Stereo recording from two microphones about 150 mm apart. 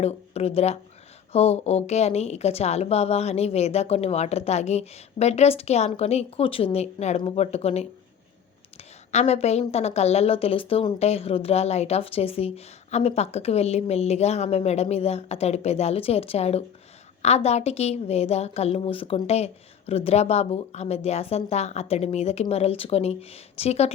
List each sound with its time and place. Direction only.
0.0 s a woman's voice: 45° left (ahead or behind)
9.1 s a woman's voice: 45° left (ahead or behind)